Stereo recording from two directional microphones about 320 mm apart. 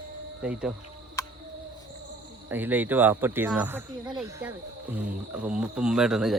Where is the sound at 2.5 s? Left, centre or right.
Centre.